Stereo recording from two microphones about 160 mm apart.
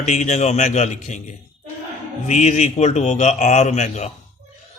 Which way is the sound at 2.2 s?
45° left (ahead or behind).